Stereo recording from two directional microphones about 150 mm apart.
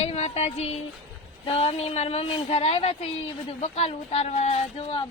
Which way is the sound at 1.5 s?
40° left (ahead or behind).